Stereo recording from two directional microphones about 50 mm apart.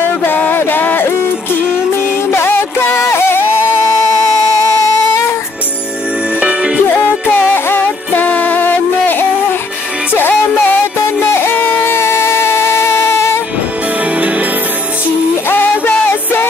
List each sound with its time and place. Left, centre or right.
0.0 s music: left
2.3 s music: left
6.4 s music: centre
7.5 s music: left
8.2 s music: left
11.8 s music: left
14.1 s music: right
15.4 s music: left